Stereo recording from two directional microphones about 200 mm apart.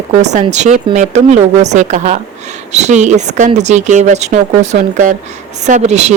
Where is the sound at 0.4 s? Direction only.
35° right (ahead or behind).